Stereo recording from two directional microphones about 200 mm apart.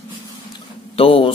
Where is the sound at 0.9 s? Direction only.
25° left (ahead or behind).